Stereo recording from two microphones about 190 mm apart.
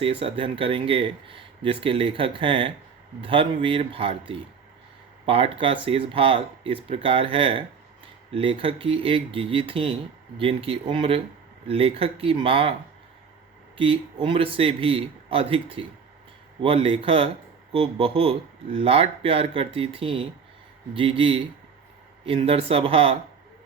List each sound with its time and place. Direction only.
0.0 s speech: 30° right (ahead or behind)
13.7 s speech: 30° right (ahead or behind)